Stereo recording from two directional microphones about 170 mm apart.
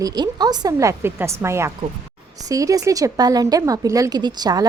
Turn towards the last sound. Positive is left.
turn(degrees=-25)  # may be behind; listen again after turning